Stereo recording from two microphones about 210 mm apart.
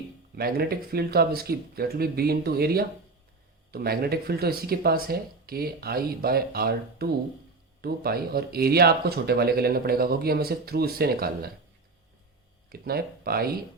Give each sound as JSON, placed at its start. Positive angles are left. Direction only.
{"t": 0.3, "sound": "speech", "side_deg": -45}
{"t": 12.7, "sound": "speech", "side_deg": -45}